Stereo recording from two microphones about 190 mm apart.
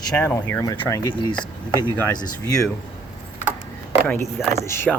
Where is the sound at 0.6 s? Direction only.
20° left (ahead or behind).